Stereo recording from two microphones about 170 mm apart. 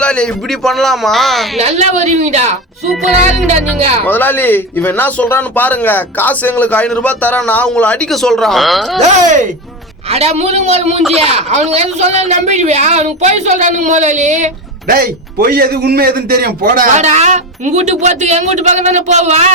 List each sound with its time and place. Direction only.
0.0 s a man's voice: 5° left (ahead or behind)
1.5 s speech: 40° right (ahead or behind)
4.0 s speech: 10° left (ahead or behind)
9.0 s a man's voice: 45° right (ahead or behind)